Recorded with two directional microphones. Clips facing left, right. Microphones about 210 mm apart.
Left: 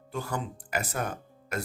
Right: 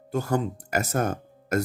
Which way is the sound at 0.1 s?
45° right (ahead or behind).